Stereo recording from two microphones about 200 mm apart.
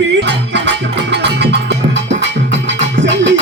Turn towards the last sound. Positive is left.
turn(degrees=-65)  # may be behind; listen again after turning